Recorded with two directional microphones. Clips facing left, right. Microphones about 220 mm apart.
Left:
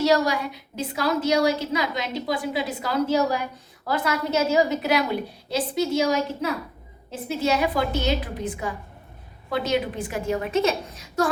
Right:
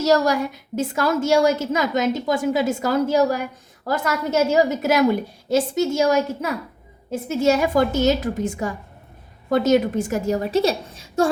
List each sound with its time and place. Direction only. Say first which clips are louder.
0.0 s a woman's voice: right 3 dB; 45° right (ahead or behind); by 11.3 s 25° right (ahead or behind)